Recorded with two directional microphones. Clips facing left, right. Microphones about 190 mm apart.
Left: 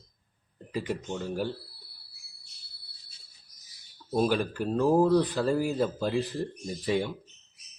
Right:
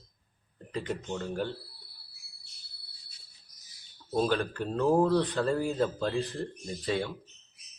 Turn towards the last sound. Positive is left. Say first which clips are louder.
# left 3 dB
turn(degrees=10)  # may be behind; listen again after turning